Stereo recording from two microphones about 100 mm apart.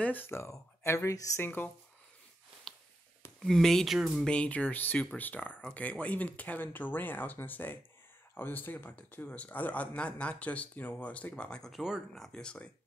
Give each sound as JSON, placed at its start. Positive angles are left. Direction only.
{"t": 0.0, "sound": "speech", "side_deg": 20}
{"t": 1.4, "sound": "speech", "side_deg": 20}
{"t": 3.4, "sound": "speech", "side_deg": 5}
{"t": 4.3, "sound": "speech", "side_deg": 10}
{"t": 12.3, "sound": "speech", "side_deg": 10}